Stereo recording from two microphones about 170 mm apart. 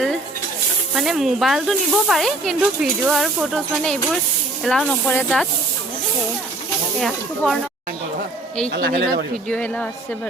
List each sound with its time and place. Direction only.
0.9 s speech: centre (ahead or behind)
7.0 s speech: centre (ahead or behind)
8.7 s speech: 65° right (ahead or behind)
9.5 s speech: 5° left (ahead or behind)